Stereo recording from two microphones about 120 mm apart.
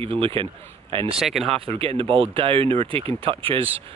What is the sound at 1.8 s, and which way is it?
Speech, 50° right (ahead or behind).